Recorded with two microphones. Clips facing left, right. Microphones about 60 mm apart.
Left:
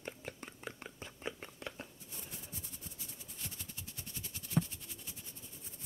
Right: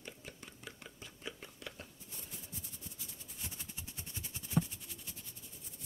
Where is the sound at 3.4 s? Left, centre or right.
Centre.